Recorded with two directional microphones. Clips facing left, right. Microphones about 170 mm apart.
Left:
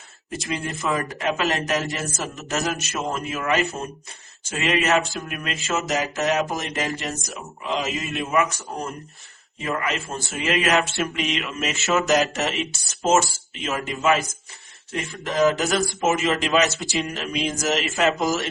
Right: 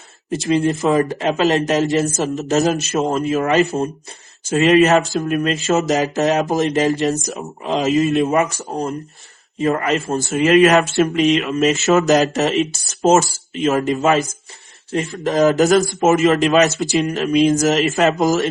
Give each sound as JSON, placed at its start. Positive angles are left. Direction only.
{"t": 0.3, "sound": "a man's voice", "side_deg": -30}